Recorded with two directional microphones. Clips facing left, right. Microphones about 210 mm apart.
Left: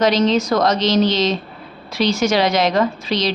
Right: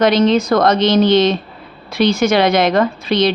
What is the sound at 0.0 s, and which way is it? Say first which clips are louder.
A woman's voice: right 3 dB; 55° right (ahead or behind).